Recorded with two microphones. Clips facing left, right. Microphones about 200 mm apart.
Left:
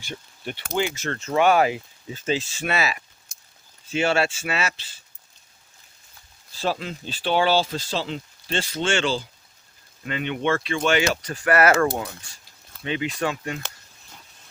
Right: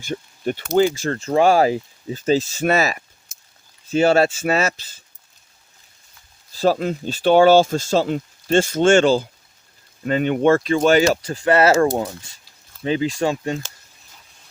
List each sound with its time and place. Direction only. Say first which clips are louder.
0.0 s speech: right 10 dB; 45° right (ahead or behind)
3.3 s a sound: even; 5° right (ahead or behind)
3.9 s speech: right 7 dB; 40° right (ahead or behind)
6.6 s speech: right 8 dB; 45° right (ahead or behind); by 11.7 s 25° right (ahead or behind)
12.8 s speech: right 6 dB; 35° right (ahead or behind)